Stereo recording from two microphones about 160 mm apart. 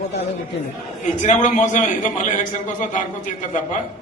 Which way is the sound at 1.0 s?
50° left (ahead or behind).